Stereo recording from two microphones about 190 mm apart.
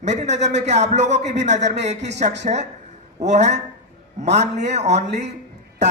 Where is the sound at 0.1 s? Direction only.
35° right (ahead or behind).